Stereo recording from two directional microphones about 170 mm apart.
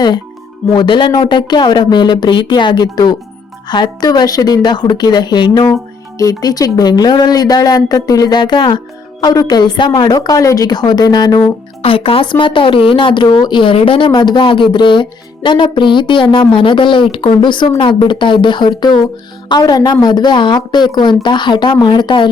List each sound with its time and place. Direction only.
0.7 s a woman's voice: 25° left (ahead or behind)